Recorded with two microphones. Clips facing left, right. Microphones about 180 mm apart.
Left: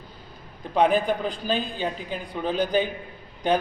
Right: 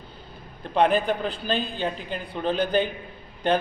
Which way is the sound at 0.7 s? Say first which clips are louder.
Even; 5° left (ahead or behind).